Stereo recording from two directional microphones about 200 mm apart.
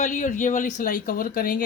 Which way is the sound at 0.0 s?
40° left (ahead or behind).